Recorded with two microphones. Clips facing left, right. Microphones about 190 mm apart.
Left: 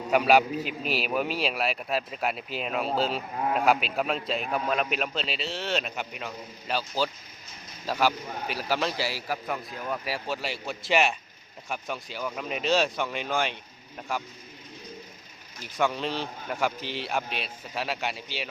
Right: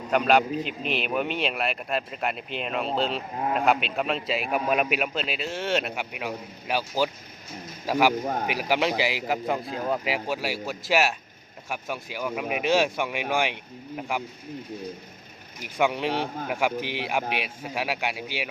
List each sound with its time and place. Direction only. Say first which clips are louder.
0.1 s a man's voice: even; 5° left (ahead or behind); by 10.0 s 30° right (ahead or behind)
10.0 s speech: right 4 dB; 15° right (ahead or behind)
15.5 s speech: right 3 dB; 15° right (ahead or behind)
16.1 s speech: right 5 dB; 60° right (ahead or behind)
16.5 s speech: right 1 dB; 10° right (ahead or behind)